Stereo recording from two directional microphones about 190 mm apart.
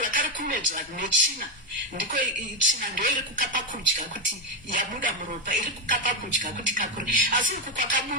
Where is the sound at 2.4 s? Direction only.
45° right (ahead or behind).